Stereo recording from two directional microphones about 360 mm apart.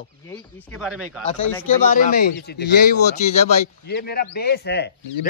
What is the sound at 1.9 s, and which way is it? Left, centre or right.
Speech, left.